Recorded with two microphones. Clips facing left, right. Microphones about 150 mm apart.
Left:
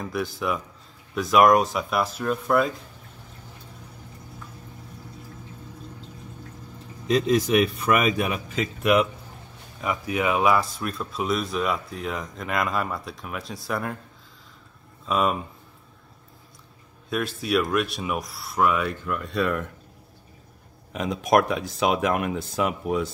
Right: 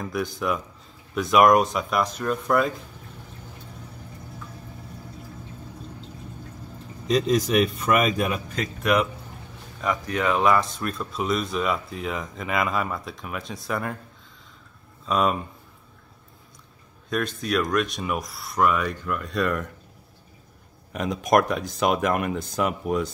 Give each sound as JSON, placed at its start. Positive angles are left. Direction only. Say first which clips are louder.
{"t": 0.0, "sound": "speech", "louder": "right 1 dB", "side_deg": 0}
{"t": 7.1, "sound": "speech", "louder": "left 1 dB", "side_deg": 0}
{"t": 15.0, "sound": "speech", "louder": "right 1 dB", "side_deg": 0}
{"t": 17.1, "sound": "speech", "louder": "left 1 dB", "side_deg": 5}
{"t": 20.9, "sound": "speech", "louder": "even", "side_deg": 0}